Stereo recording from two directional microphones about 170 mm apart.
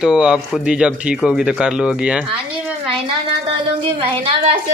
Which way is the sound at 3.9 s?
35° right (ahead or behind).